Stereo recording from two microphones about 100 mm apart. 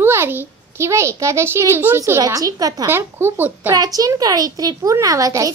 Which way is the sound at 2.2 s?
35° right (ahead or behind).